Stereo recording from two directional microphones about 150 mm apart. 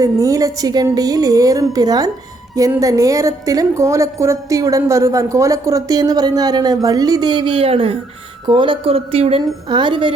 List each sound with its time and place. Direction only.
0.0 s a woman's voice: 20° right (ahead or behind)